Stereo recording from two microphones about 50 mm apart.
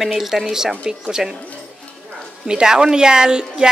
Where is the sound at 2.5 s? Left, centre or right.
Centre.